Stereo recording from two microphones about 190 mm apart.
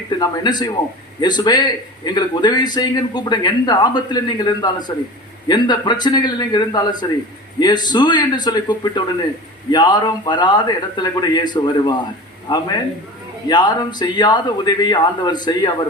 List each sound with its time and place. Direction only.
0.2 s a man's voice: 20° left (ahead or behind)